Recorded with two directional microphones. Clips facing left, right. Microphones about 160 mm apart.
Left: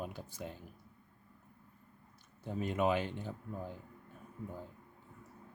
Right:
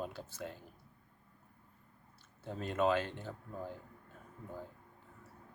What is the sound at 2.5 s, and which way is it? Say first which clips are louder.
Speech: even; 15° left (ahead or behind).